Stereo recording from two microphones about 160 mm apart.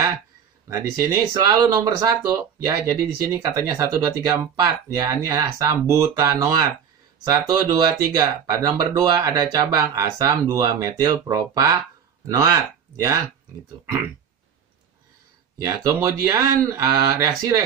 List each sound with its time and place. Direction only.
0.7 s speech: 20° right (ahead or behind)
15.6 s speech: 20° right (ahead or behind)